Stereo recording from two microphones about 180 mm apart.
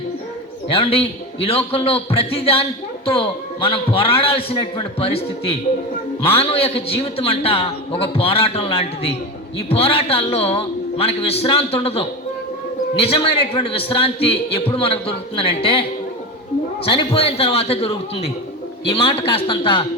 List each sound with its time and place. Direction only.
0.7 s a man's voice: 30° left (ahead or behind)